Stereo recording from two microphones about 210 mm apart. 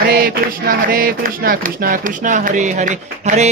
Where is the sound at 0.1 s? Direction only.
45° right (ahead or behind).